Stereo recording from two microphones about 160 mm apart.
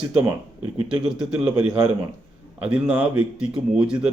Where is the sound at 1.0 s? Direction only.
5° right (ahead or behind).